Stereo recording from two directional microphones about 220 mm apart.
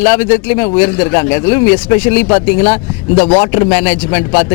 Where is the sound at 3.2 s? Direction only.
25° left (ahead or behind).